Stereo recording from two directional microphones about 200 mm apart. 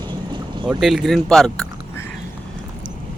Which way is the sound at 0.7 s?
Centre (ahead or behind).